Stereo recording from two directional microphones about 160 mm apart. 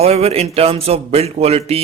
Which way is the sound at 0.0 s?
40° right (ahead or behind).